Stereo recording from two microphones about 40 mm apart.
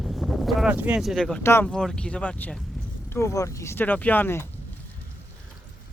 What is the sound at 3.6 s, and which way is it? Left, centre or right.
Speech, left.